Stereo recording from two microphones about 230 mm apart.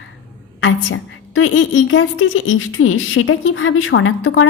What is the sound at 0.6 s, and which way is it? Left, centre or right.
Speech, left.